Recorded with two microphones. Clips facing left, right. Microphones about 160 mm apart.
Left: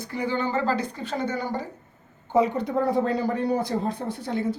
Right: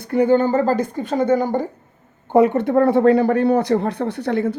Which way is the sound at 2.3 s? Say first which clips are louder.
Right 8 dB; 60° right (ahead or behind).